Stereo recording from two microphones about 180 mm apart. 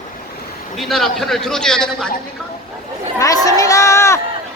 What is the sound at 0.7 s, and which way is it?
A man's voice, centre (ahead or behind).